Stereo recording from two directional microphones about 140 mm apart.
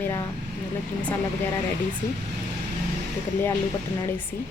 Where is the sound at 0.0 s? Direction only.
20° left (ahead or behind).